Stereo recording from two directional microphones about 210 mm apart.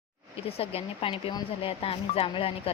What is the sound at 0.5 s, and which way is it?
Speech, 30° left (ahead or behind).